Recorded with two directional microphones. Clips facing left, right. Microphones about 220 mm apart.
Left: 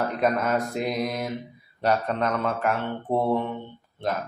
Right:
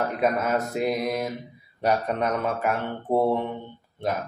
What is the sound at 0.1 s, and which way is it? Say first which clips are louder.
A man's voice: even; 5° right (ahead or behind).